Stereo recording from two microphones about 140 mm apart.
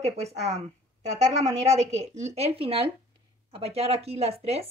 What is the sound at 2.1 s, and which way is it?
Speech, 50° right (ahead or behind).